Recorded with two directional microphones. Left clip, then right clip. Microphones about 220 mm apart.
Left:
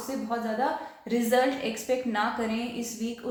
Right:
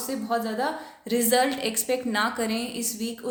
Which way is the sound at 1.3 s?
45° right (ahead or behind).